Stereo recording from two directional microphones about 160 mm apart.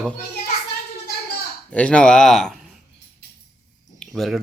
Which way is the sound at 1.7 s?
5° left (ahead or behind).